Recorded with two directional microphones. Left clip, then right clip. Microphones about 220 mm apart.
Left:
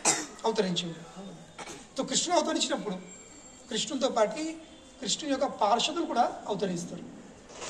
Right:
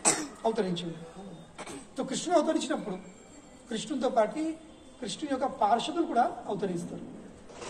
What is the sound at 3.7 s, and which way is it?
A woman's voice, 50° left (ahead or behind).